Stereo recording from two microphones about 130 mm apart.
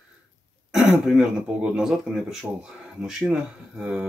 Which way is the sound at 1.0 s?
5° right (ahead or behind).